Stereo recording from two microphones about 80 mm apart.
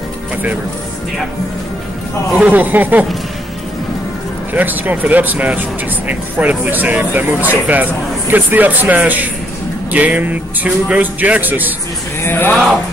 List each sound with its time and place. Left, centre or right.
2.4 s speech: right
4.6 s speech: right
12.2 s speech: left